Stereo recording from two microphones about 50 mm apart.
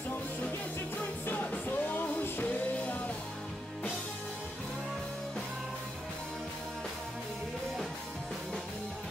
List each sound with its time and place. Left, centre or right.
1.2 s music: left
2.0 s music: left
2.4 s music: left